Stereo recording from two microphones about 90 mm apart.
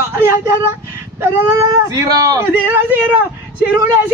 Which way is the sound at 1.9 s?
45° right (ahead or behind).